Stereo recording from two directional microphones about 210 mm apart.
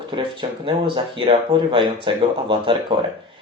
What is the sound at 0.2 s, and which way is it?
Speech, 25° right (ahead or behind).